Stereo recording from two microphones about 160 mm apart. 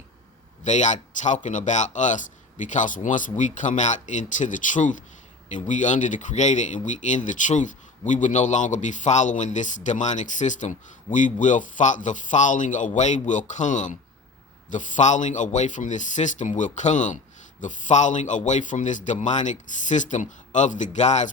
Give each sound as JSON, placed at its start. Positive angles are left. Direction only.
{"t": 0.6, "sound": "a man's voice", "side_deg": 50}